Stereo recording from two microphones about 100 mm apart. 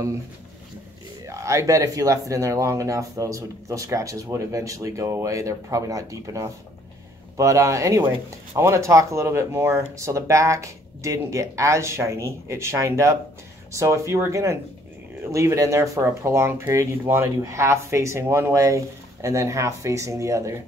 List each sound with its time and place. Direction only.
1.2 s speech: 30° right (ahead or behind)